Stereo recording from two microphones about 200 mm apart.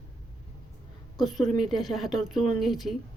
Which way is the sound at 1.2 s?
Centre (ahead or behind).